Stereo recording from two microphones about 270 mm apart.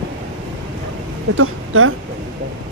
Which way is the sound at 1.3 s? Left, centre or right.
Right.